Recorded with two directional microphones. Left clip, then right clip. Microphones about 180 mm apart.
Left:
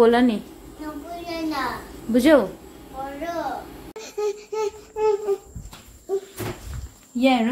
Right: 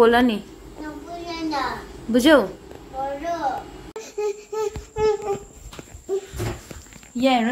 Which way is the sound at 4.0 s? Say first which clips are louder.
Even; 15° left (ahead or behind).